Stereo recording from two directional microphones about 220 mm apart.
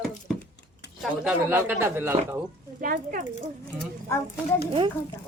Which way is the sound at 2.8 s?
40° right (ahead or behind).